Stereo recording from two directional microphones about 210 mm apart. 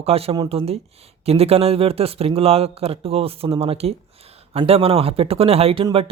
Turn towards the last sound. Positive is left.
turn(degrees=-25)  # may be behind; listen again after turning